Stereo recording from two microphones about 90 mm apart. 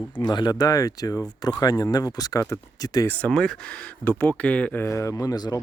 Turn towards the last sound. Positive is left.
turn(degrees=45)  # may be behind; listen again after turning